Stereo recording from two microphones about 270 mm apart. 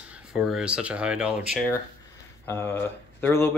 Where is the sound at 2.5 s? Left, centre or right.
Centre.